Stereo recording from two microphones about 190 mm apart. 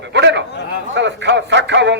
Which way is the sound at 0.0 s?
65° right (ahead or behind).